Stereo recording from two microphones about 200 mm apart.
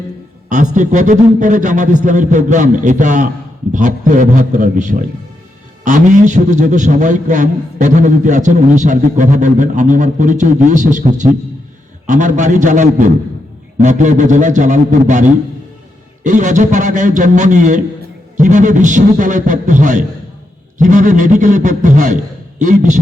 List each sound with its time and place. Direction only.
0.5 s a man's voice: 40° right (ahead or behind)